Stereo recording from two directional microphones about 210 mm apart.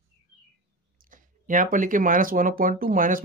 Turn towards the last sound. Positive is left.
turn(degrees=-40)  # may be behind; listen again after turning